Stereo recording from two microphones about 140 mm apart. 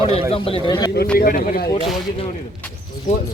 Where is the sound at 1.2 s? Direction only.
90° left.